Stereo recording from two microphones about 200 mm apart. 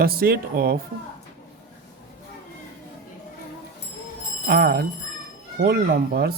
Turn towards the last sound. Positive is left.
turn(degrees=-50)  # may be behind; listen again after turning